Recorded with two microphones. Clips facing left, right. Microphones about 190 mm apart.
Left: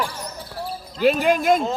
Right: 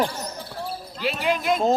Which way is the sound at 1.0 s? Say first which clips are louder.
Left 7 dB; 45° left (ahead or behind).